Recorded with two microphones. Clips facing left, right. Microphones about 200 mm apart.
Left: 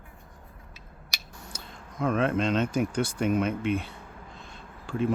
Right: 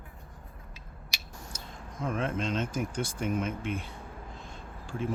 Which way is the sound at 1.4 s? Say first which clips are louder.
Right 1 dB; 65° left (ahead or behind).